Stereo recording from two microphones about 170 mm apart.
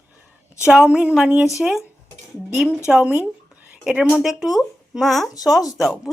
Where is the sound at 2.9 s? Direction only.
5° right (ahead or behind).